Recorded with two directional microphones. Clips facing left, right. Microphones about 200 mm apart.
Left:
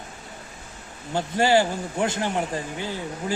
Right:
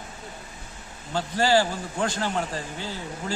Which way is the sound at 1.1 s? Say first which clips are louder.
Left 2 dB; 20° left (ahead or behind).